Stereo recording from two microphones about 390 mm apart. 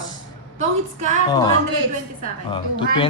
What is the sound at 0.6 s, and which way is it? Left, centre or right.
Speech, centre.